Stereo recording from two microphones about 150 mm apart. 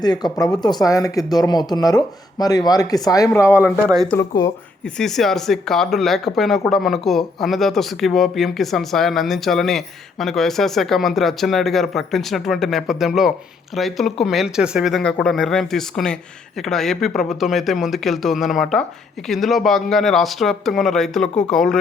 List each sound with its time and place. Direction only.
0.0 s speech: 30° left (ahead or behind)
3.7 s speech: 5° left (ahead or behind)
4.2 s speech: 20° left (ahead or behind)
4.9 s speech: centre (ahead or behind)